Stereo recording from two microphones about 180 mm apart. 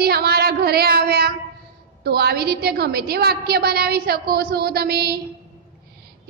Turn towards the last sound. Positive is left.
turn(degrees=-60)  # may be behind; listen again after turning